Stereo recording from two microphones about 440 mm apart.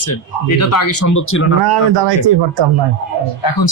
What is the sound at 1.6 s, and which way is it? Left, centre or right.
A man's voice, right.